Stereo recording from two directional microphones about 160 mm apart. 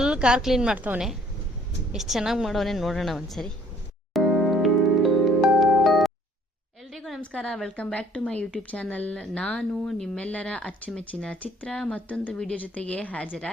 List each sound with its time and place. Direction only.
0.0 s a woman's voice: 5° right (ahead or behind)
4.1 s music: centre (ahead or behind)
6.9 s a woman's voice: centre (ahead or behind)